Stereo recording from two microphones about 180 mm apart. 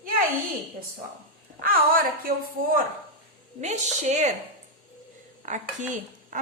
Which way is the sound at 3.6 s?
40° right (ahead or behind).